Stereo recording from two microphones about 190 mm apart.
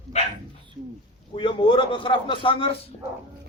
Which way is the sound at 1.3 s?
25° left (ahead or behind).